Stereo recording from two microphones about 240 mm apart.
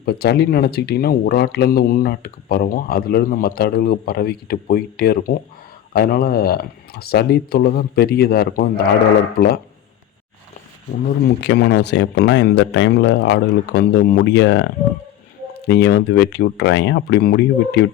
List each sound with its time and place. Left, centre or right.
0.0 s speech: left
11.4 s speech: left